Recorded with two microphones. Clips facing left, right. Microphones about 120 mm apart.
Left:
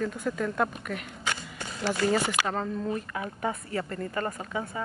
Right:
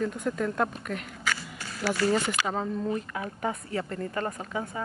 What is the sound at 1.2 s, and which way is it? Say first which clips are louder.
Single-lens reflex camera: right 1 dB; 20° left (ahead or behind).